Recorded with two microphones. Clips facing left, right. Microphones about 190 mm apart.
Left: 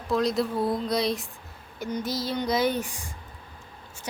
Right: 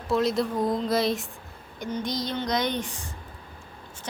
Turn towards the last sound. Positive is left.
turn(degrees=10)  # may be behind; listen again after turning